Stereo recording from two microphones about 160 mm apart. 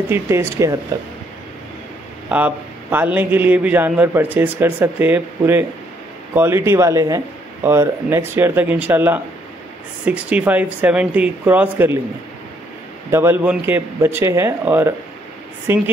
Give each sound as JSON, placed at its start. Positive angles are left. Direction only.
{"t": 0.1, "sound": "a man's voice", "side_deg": -15}
{"t": 2.2, "sound": "a man's voice", "side_deg": -10}
{"t": 13.1, "sound": "a man's voice", "side_deg": -15}